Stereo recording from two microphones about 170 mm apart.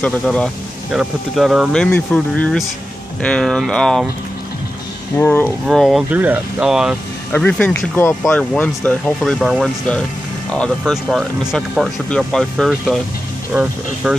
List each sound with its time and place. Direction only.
0.0 s speech: 5° left (ahead or behind)
5.1 s speech: 10° left (ahead or behind)
5.7 s speech: centre (ahead or behind)
7.3 s speech: 10° left (ahead or behind); by 14.1 s 10° right (ahead or behind)